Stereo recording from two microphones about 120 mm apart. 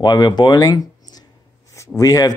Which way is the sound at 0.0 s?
35° left (ahead or behind).